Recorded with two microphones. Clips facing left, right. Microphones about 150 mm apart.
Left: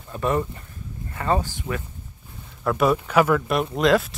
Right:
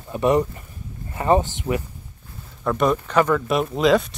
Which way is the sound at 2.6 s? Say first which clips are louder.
Even; 5° left (ahead or behind).